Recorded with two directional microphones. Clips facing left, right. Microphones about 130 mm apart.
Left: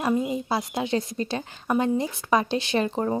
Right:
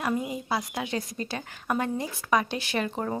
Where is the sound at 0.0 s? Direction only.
25° left (ahead or behind).